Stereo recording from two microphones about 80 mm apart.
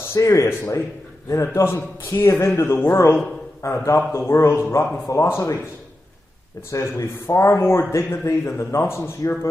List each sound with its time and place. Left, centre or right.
0.1 s a man's voice: left
6.7 s a man's voice: left